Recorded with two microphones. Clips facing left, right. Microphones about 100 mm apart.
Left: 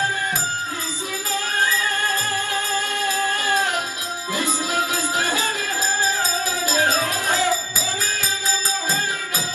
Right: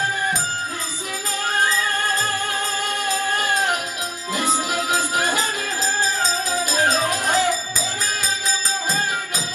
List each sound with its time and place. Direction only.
3.3 s music: 15° right (ahead or behind)